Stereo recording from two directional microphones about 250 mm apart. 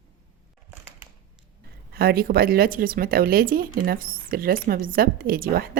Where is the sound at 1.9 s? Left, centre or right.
Right.